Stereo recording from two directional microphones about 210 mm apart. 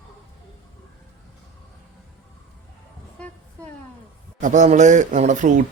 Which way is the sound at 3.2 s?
5° left (ahead or behind).